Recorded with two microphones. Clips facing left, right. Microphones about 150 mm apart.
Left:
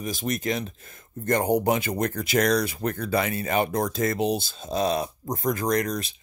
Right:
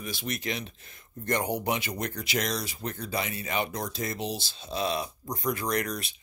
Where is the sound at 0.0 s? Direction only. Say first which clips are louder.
Left 6 dB; 45° left (ahead or behind).